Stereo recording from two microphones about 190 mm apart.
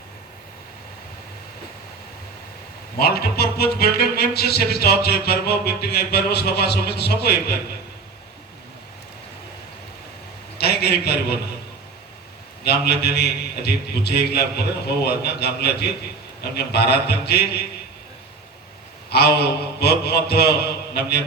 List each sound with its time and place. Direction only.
3.0 s speech: 55° left (ahead or behind)
10.6 s a man's voice: 60° left (ahead or behind)
12.6 s speech: 60° left (ahead or behind)
19.1 s speech: 55° left (ahead or behind)